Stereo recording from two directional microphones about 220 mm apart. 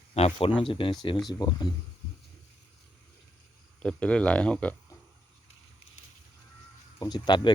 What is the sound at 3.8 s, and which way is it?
Speech, 5° left (ahead or behind).